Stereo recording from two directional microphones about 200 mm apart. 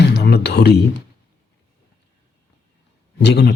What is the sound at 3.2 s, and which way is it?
Speech, 60° left (ahead or behind).